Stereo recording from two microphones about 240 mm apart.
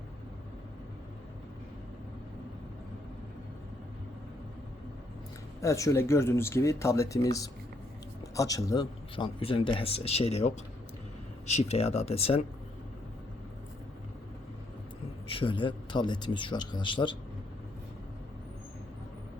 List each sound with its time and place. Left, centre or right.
5.5 s a man's voice: centre
15.3 s a man's voice: left